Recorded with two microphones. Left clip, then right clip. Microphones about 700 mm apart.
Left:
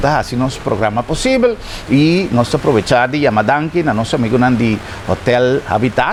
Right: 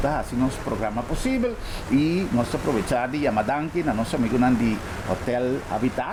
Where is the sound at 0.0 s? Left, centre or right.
Left.